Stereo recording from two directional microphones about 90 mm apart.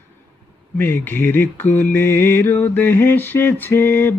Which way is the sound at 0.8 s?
20° left (ahead or behind).